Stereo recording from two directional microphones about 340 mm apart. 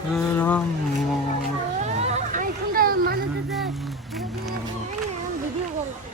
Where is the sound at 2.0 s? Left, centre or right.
Right.